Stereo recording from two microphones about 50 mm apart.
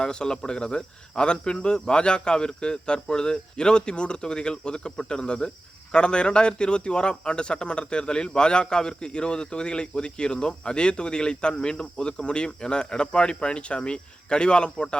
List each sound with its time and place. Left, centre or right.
0.0 s a man's voice: centre